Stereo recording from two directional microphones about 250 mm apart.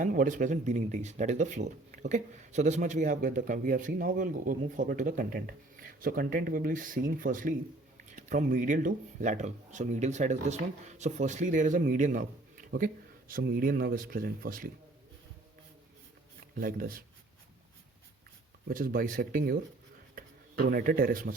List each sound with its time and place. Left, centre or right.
0.0 s speech: right
16.6 s speech: right
18.7 s speech: right